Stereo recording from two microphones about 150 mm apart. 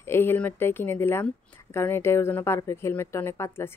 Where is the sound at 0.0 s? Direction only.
15° left (ahead or behind).